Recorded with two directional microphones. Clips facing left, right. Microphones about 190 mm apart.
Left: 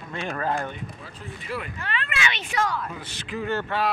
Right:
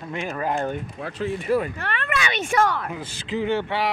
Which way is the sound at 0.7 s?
55° right (ahead or behind).